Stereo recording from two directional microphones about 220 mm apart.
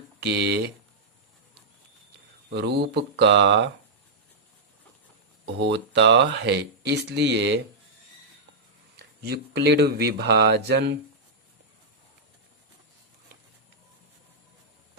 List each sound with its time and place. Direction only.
0.2 s speech: 50° right (ahead or behind)
2.5 s speech: 50° right (ahead or behind)
5.5 s speech: 50° right (ahead or behind)
9.0 s speech: 50° right (ahead or behind)